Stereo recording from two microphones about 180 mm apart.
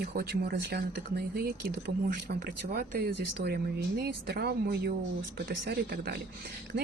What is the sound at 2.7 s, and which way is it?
Speech, 65° right (ahead or behind).